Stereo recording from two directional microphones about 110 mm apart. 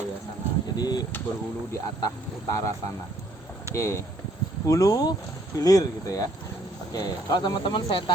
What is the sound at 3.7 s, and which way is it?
Speech, 25° left (ahead or behind).